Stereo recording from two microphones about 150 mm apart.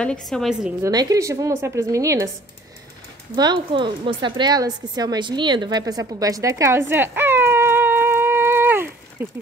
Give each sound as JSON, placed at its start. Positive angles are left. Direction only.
{"t": 0.0, "sound": "a woman's voice", "side_deg": 5}
{"t": 0.8, "sound": "a woman's voice", "side_deg": -25}
{"t": 3.3, "sound": "speech", "side_deg": -30}